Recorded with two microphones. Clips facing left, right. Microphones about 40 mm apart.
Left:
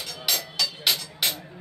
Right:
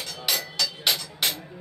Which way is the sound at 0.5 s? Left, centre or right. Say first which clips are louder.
Even; centre.